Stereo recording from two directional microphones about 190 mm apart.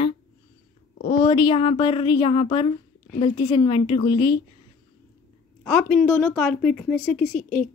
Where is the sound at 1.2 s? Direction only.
25° left (ahead or behind).